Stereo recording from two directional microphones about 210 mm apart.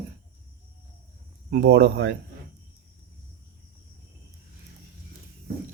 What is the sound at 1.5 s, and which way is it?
Speech, 55° right (ahead or behind).